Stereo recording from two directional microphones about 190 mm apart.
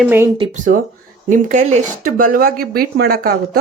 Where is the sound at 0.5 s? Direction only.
40° right (ahead or behind).